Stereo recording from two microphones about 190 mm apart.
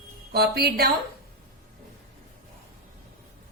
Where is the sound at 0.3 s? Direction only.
55° right (ahead or behind).